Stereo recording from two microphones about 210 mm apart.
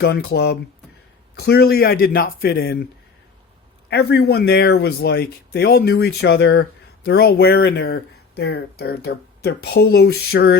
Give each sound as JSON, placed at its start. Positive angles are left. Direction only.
{"t": 0.0, "sound": "speech", "side_deg": 50}
{"t": 3.8, "sound": "speech", "side_deg": 50}